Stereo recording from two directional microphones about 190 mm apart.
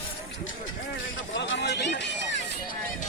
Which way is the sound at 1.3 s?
70° left (ahead or behind).